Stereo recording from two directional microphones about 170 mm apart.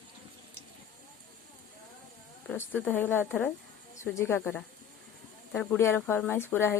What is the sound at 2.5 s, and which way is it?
Speech, 10° left (ahead or behind).